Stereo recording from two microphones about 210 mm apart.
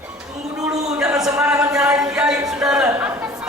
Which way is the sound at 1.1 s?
15° right (ahead or behind).